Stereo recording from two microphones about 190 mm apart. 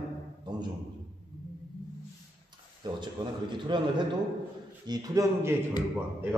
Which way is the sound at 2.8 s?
25° right (ahead or behind).